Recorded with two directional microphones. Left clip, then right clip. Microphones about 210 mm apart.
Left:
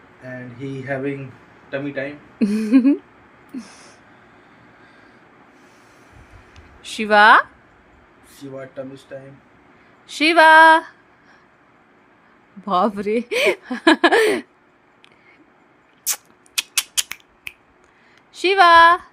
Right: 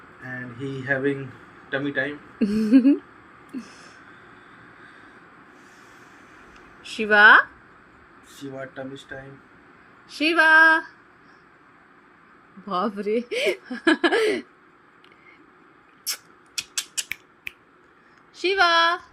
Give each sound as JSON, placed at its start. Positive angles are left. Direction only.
{"t": 2.0, "sound": "speech", "side_deg": 15}
{"t": 6.8, "sound": "speech", "side_deg": 20}
{"t": 10.1, "sound": "speech", "side_deg": 25}
{"t": 12.6, "sound": "speech", "side_deg": 20}
{"t": 16.0, "sound": "a sound", "side_deg": 25}
{"t": 18.3, "sound": "speech", "side_deg": 20}